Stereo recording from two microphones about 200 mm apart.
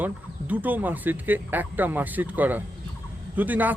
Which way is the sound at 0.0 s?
10° right (ahead or behind).